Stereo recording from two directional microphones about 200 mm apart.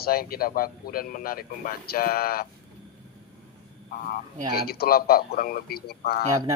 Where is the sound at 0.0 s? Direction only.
50° left (ahead or behind).